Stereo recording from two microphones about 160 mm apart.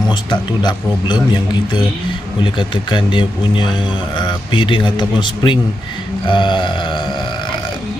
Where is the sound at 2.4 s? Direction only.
30° left (ahead or behind).